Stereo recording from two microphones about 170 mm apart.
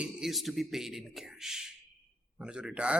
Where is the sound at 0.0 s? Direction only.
Centre (ahead or behind).